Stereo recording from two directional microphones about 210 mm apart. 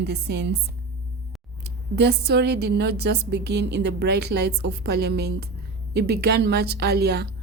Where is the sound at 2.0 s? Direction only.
50° right (ahead or behind).